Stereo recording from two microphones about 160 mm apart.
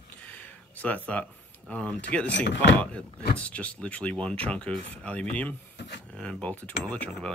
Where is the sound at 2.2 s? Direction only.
90° left.